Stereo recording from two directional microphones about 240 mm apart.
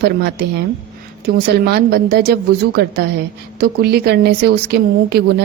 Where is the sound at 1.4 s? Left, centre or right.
Right.